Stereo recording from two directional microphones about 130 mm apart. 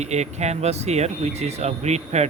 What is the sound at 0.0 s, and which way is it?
Speech, 60° right (ahead or behind).